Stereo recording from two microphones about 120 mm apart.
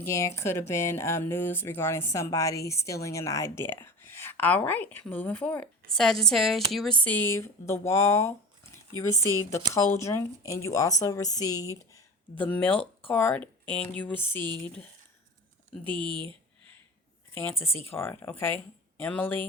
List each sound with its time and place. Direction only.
0.0 s speech: 25° left (ahead or behind); by 6.9 s centre (ahead or behind)
7.0 s speech: 15° left (ahead or behind)
12.3 s speech: 15° left (ahead or behind)
14.2 s speech: 40° right (ahead or behind)
15.9 s speech: 45° right (ahead or behind)
17.4 s speech: 20° left (ahead or behind)